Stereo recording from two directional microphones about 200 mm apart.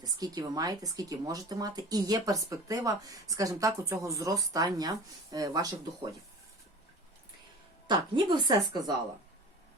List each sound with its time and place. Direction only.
0.0 s speech: 20° right (ahead or behind)
7.9 s a woman's voice: 20° right (ahead or behind)